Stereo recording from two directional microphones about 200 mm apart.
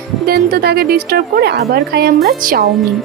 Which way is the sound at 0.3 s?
50° right (ahead or behind).